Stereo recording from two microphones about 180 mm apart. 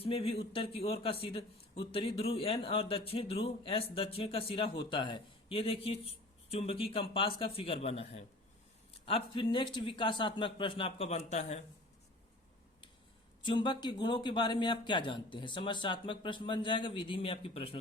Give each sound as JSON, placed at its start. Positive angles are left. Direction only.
{"t": 0.0, "sound": "a man's voice", "side_deg": 35}
{"t": 13.4, "sound": "a man's voice", "side_deg": 25}